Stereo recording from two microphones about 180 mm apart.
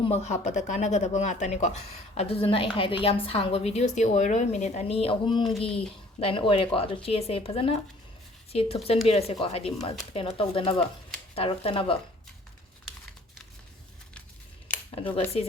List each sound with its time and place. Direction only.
0.0 s speech: 35° left (ahead or behind)
14.7 s a sound: 5° left (ahead or behind)
15.1 s speech: 35° left (ahead or behind)